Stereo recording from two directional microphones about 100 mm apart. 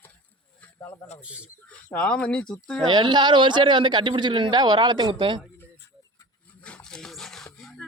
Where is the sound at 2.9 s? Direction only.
50° right (ahead or behind).